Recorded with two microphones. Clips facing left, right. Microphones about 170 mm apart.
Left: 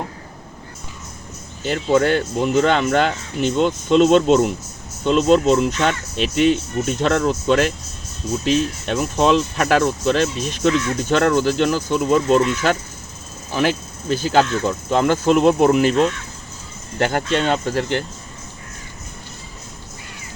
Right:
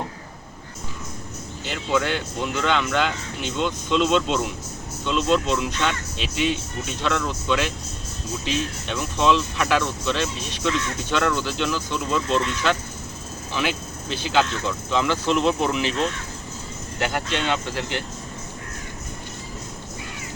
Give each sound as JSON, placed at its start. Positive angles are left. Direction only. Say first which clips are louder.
{"t": 1.6, "sound": "speech", "louder": "left 7 dB", "side_deg": 45}